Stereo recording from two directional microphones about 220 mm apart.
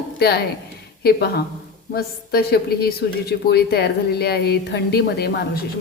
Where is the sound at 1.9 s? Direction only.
45° left (ahead or behind).